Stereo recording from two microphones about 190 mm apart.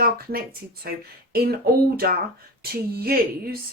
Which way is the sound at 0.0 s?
50° right (ahead or behind).